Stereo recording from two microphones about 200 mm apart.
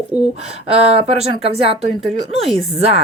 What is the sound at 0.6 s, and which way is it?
Speech, 30° right (ahead or behind).